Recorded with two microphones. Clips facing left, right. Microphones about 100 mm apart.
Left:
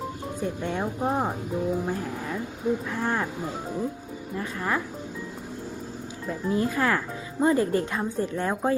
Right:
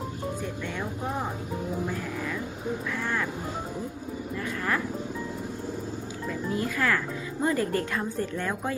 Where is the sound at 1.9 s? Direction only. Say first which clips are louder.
Left 2 dB; 35° left (ahead or behind).